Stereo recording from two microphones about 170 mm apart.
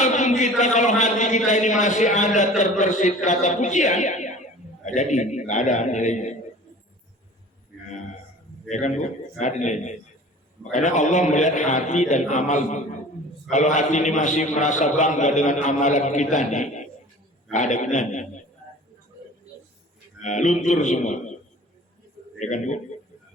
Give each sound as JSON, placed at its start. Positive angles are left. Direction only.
{"t": 0.0, "sound": "a sound", "side_deg": 45}
{"t": 1.5, "sound": "a man's voice", "side_deg": 45}
{"t": 8.7, "sound": "a man's voice", "side_deg": 45}
{"t": 20.2, "sound": "a man's voice", "side_deg": 45}
{"t": 22.4, "sound": "a man's voice", "side_deg": 45}